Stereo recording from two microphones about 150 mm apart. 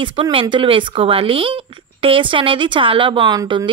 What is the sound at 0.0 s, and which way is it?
Speech, 35° right (ahead or behind).